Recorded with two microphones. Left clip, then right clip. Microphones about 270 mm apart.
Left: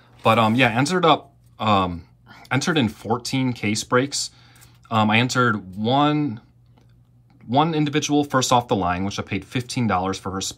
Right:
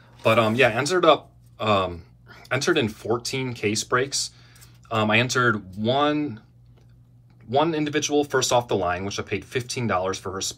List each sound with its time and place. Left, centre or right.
0.2 s speech: left
7.5 s speech: left